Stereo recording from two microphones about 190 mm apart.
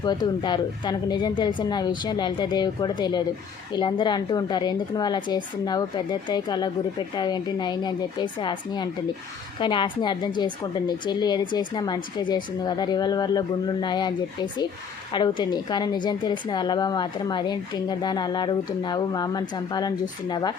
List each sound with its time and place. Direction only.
0.0 s a woman's voice: 25° left (ahead or behind)